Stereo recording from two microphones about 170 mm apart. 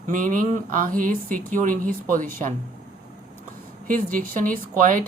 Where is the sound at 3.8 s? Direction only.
55° right (ahead or behind).